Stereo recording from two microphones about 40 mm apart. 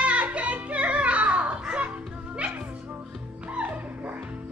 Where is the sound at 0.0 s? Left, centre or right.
Right.